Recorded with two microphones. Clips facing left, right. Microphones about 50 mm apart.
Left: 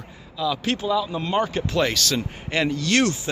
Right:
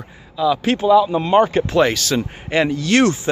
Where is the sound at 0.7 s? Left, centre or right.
Right.